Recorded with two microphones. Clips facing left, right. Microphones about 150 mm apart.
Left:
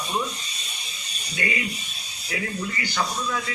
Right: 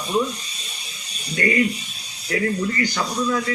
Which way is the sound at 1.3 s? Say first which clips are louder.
Right 9 dB; 45° right (ahead or behind).